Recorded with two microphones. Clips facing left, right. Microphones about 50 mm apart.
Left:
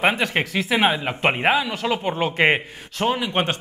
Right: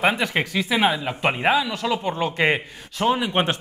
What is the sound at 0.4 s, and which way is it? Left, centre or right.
Speech, centre.